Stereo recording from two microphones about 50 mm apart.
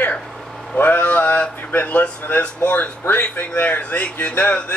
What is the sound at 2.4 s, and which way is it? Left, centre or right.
Speech, left.